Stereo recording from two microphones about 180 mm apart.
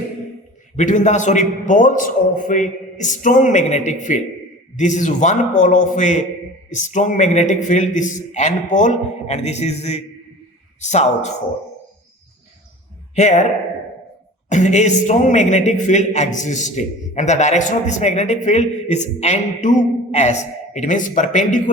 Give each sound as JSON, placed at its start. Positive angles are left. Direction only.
{"t": 0.8, "sound": "a man's voice", "side_deg": 40}
{"t": 13.1, "sound": "a man's voice", "side_deg": 40}
{"t": 14.5, "sound": "a man's voice", "side_deg": 40}